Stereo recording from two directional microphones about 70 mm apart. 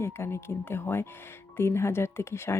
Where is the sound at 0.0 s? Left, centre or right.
Left.